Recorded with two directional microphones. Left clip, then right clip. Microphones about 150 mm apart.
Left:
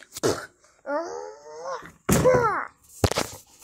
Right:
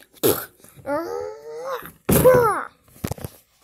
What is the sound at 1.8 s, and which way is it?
Sneeze, 50° right (ahead or behind).